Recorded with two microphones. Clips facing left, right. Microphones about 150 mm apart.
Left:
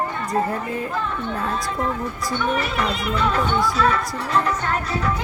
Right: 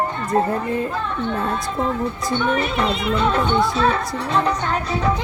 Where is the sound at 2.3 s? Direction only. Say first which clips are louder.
Right 2 dB; 25° right (ahead or behind).